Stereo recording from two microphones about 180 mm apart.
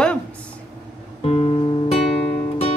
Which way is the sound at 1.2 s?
35° left (ahead or behind).